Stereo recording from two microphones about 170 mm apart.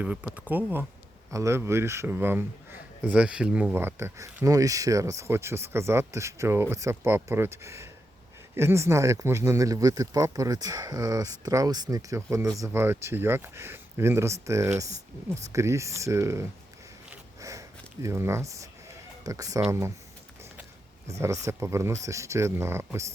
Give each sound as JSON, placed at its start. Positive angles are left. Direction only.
{"t": 0.0, "sound": "speech", "side_deg": -10}
{"t": 17.4, "sound": "sniff", "side_deg": -20}
{"t": 19.2, "sound": "speech", "side_deg": -20}
{"t": 21.4, "sound": "speech", "side_deg": -15}